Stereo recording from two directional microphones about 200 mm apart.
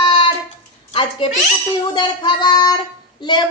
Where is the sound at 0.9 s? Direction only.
25° left (ahead or behind).